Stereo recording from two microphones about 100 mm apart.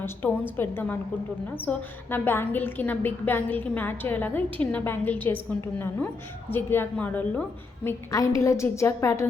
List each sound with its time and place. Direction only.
0.0 s a woman's voice: 20° left (ahead or behind)
6.5 s a woman's voice: 20° left (ahead or behind)
8.1 s a woman's voice: 35° left (ahead or behind)